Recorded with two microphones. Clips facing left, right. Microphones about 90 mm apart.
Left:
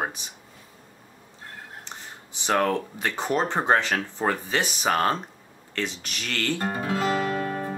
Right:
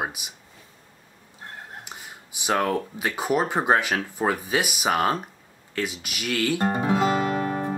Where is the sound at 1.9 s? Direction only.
10° right (ahead or behind).